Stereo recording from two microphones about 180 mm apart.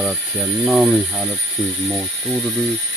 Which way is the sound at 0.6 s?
Centre (ahead or behind).